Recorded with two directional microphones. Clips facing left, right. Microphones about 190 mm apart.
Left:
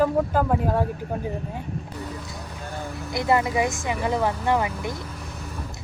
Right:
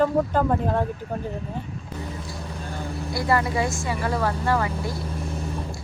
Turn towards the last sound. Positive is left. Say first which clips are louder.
# left 1 dB
turn(degrees=15)  # may be behind; listen again after turning